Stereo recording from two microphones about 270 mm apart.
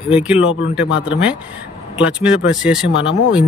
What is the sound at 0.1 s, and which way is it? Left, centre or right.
Speech, centre.